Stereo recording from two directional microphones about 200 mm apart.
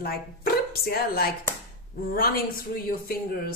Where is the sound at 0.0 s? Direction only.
50° left (ahead or behind).